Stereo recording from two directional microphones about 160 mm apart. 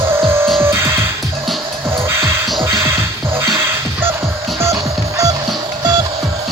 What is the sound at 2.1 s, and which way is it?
Music, 15° right (ahead or behind).